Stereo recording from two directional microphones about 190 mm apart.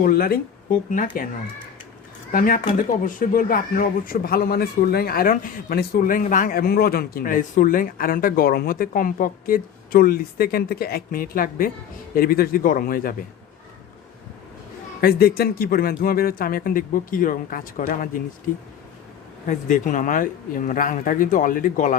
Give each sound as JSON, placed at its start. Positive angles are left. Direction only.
{"t": 0.0, "sound": "speech", "side_deg": 50}
{"t": 2.3, "sound": "speech", "side_deg": 45}
{"t": 15.0, "sound": "speech", "side_deg": 55}
{"t": 19.5, "sound": "speech", "side_deg": 40}